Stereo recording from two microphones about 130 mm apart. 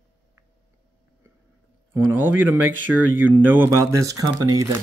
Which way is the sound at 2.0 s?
15° right (ahead or behind).